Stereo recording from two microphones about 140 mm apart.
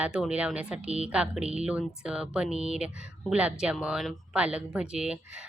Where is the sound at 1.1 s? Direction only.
5° right (ahead or behind).